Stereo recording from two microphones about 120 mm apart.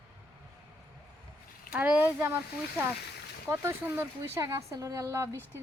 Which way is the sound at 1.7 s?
15° right (ahead or behind).